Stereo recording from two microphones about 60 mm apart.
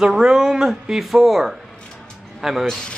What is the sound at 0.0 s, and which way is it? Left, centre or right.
A woman's voice, centre.